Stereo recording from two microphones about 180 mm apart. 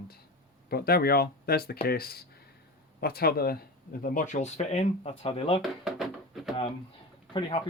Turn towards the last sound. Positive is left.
turn(degrees=30)  # may be behind; listen again after turning